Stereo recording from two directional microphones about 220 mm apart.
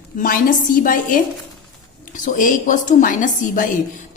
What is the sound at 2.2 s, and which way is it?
A woman's voice, 35° left (ahead or behind).